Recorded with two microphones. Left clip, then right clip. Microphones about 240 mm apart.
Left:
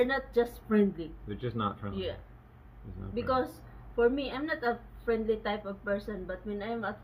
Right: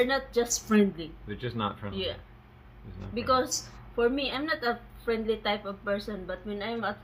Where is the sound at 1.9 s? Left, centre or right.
Right.